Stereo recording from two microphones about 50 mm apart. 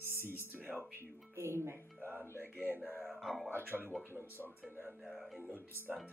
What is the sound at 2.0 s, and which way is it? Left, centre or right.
Music, right.